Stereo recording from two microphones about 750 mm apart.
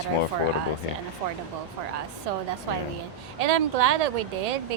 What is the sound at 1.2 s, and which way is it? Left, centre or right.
Speech, right.